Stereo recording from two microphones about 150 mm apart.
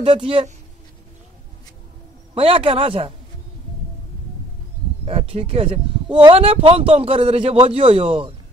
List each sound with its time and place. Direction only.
0.0 s speech: 35° right (ahead or behind)
2.3 s speech: 40° right (ahead or behind)
5.0 s speech: 40° right (ahead or behind)